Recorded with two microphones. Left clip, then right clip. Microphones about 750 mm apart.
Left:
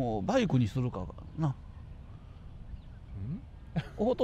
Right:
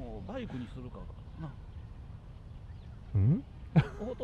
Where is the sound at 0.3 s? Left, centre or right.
Left.